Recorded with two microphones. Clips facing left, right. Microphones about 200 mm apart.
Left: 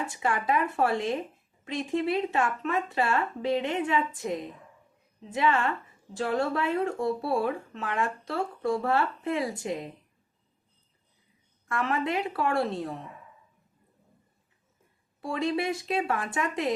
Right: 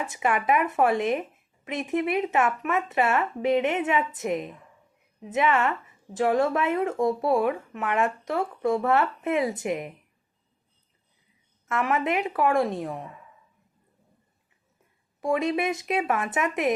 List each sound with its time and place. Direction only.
0.0 s speech: 20° right (ahead or behind)
11.7 s speech: 20° right (ahead or behind)
15.2 s speech: 20° right (ahead or behind)